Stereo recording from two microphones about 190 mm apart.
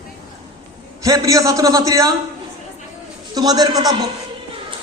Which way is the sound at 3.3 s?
20° right (ahead or behind).